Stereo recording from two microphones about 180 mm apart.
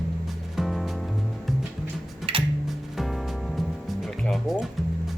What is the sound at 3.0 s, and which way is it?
Music, centre (ahead or behind).